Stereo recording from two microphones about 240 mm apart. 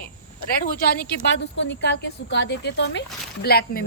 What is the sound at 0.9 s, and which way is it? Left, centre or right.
A woman's voice, left.